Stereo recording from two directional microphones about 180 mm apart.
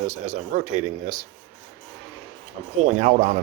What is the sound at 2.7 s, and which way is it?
Speech, 40° right (ahead or behind).